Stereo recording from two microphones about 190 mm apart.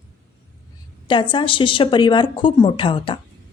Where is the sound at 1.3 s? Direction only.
25° left (ahead or behind).